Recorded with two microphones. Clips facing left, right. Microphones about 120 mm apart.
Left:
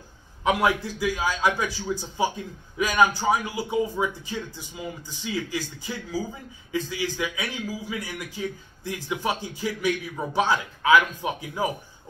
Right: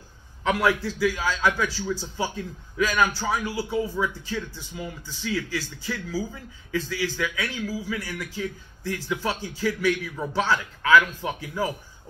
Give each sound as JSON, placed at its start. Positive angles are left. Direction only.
{"t": 0.4, "sound": "a man's voice", "side_deg": 20}